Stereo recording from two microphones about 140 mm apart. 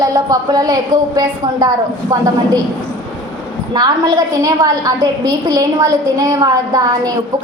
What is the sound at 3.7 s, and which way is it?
A woman's voice, 30° right (ahead or behind).